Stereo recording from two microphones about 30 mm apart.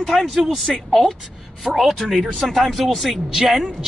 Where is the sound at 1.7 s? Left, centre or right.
Right.